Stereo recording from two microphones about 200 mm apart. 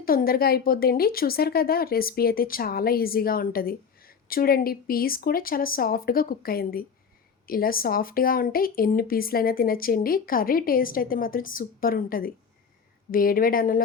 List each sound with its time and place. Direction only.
0.0 s speech: 45° left (ahead or behind)